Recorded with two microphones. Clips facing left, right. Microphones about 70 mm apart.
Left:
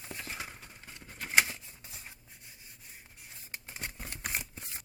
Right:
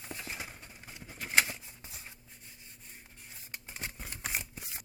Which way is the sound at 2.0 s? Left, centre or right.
Centre.